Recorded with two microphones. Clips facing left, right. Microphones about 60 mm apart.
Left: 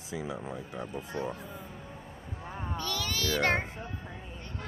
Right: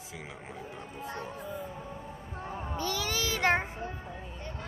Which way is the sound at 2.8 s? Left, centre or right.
Right.